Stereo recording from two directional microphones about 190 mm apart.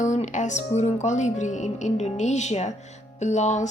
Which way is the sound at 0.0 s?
40° left (ahead or behind).